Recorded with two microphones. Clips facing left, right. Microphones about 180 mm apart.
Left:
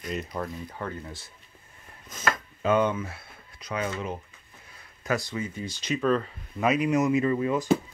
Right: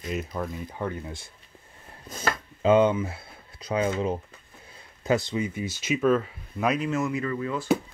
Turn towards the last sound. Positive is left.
turn(degrees=20)  # may be behind; listen again after turning